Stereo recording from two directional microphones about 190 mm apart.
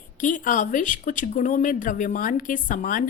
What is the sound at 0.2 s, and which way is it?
Speech, 45° left (ahead or behind).